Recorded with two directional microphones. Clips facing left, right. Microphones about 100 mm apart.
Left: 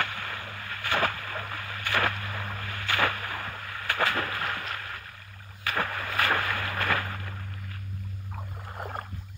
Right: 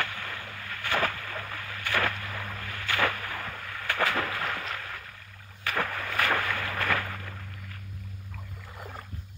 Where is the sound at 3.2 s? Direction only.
35° left (ahead or behind).